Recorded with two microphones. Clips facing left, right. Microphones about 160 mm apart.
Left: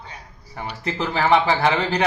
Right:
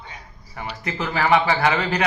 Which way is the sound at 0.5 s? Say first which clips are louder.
Left 2 dB; 30° left (ahead or behind).